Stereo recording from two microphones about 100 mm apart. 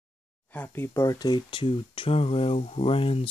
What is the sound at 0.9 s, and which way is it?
Speech, 40° left (ahead or behind).